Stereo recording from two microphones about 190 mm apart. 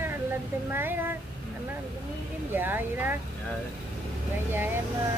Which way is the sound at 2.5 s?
10° right (ahead or behind).